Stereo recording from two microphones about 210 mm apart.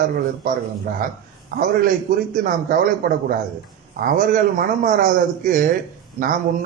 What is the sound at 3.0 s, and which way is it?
A man's voice, 45° right (ahead or behind).